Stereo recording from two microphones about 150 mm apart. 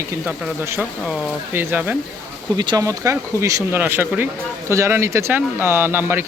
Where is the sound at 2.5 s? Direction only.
25° right (ahead or behind).